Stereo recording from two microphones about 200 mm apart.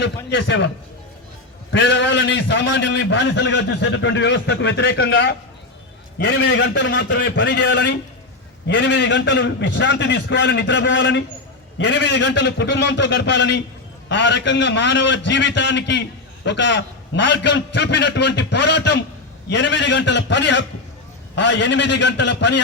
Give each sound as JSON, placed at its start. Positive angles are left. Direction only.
{"t": 0.3, "sound": "a man's voice", "side_deg": 65}
{"t": 1.7, "sound": "a man's voice", "side_deg": 65}